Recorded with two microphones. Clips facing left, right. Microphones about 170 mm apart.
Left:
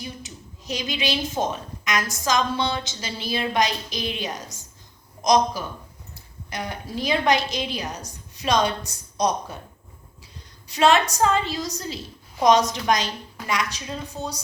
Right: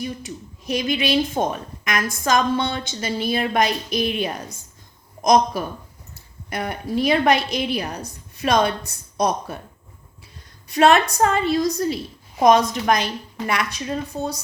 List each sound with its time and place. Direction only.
0.0 s a woman's voice: 55° right (ahead or behind)
10.7 s a woman's voice: 55° right (ahead or behind)